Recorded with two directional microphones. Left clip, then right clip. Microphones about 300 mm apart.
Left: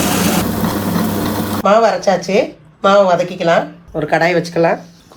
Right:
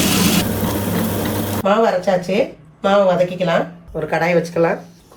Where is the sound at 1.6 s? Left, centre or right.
Left.